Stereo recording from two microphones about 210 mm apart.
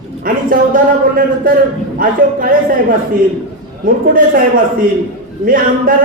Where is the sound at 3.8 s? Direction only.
40° right (ahead or behind).